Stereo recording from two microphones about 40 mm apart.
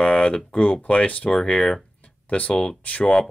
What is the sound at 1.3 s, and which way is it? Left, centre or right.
Speech, centre.